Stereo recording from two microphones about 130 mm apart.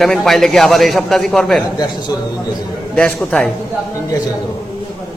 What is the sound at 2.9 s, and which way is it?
Speech, 5° left (ahead or behind).